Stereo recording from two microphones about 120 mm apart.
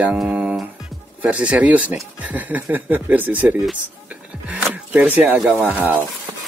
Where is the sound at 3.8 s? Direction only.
10° right (ahead or behind).